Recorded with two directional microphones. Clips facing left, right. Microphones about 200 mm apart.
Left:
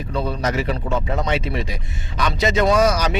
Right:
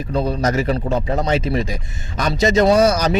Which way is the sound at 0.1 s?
40° right (ahead or behind).